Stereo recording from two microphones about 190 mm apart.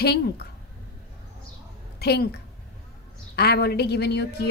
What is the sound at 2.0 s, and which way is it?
Speech, 60° left (ahead or behind).